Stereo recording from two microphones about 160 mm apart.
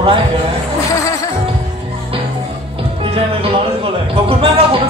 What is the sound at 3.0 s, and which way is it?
Music, 35° right (ahead or behind).